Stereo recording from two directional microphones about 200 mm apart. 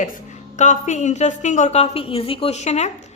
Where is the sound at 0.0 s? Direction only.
40° left (ahead or behind).